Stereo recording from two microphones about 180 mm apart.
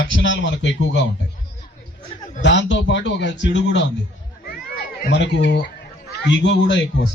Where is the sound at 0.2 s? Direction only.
90° left.